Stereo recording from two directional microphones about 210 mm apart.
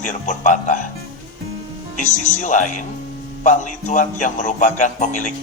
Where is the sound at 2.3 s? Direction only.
35° left (ahead or behind).